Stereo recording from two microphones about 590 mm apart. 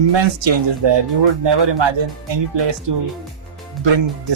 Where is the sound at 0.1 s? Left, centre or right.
Right.